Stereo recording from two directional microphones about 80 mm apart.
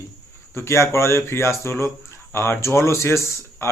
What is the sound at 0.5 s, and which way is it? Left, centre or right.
A man's voice, left.